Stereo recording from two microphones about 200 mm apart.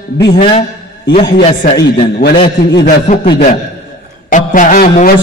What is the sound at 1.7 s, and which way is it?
Speech, 25° left (ahead or behind).